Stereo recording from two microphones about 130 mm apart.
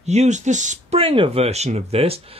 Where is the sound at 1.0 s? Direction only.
50° right (ahead or behind).